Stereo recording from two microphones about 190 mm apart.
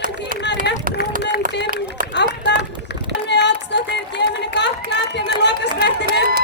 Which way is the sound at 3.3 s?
65° left (ahead or behind).